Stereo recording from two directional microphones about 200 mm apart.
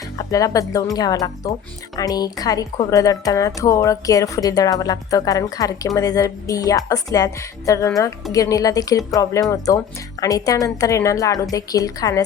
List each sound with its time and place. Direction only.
0.2 s a woman's voice: 15° left (ahead or behind)